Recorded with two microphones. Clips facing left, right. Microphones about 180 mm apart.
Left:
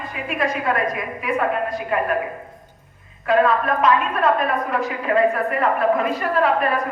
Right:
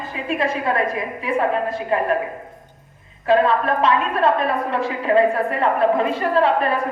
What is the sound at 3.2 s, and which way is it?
A woman's voice, 30° right (ahead or behind).